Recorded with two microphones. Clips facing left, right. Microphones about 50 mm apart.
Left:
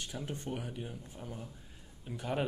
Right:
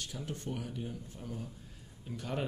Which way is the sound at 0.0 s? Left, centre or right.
Left.